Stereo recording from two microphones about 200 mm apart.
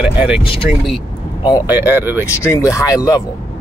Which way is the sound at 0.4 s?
25° left (ahead or behind).